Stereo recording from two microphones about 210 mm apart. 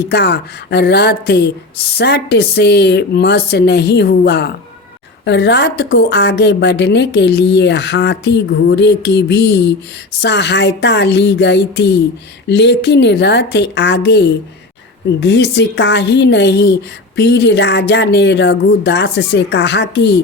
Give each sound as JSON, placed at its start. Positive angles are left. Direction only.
{"t": 0.1, "sound": "speech", "side_deg": 50}